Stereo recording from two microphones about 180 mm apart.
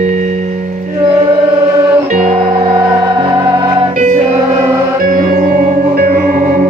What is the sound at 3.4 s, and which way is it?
Music, 20° right (ahead or behind).